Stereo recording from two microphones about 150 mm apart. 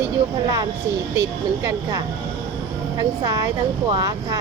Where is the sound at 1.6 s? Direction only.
25° right (ahead or behind).